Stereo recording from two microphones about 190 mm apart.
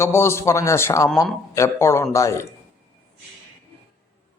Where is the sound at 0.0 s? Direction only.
15° left (ahead or behind).